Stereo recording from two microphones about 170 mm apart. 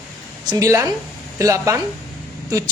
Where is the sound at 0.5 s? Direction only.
20° right (ahead or behind).